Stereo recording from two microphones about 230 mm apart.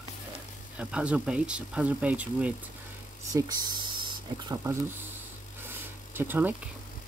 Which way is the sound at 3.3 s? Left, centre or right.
Centre.